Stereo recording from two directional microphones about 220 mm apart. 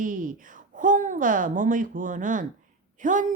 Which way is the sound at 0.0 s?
40° right (ahead or behind).